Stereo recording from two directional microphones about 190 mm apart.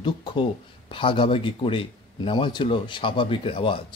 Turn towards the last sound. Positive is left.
turn(degrees=30)  # may be behind; listen again after turning